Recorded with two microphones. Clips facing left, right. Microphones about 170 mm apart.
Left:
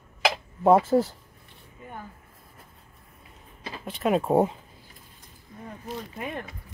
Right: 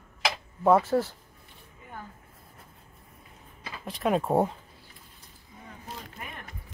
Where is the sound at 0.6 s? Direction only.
25° left (ahead or behind).